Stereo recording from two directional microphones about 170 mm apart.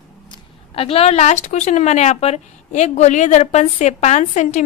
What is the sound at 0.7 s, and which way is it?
Speech, 35° left (ahead or behind).